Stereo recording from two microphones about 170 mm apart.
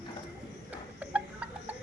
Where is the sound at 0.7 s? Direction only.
10° right (ahead or behind).